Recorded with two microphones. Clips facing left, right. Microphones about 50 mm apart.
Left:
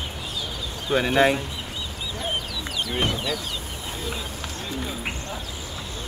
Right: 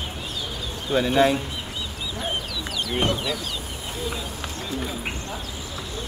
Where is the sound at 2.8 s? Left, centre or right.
Centre.